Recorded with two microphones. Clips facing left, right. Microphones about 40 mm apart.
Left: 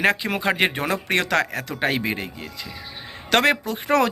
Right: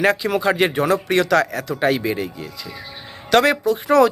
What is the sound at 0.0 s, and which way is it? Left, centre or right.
A man's voice, left.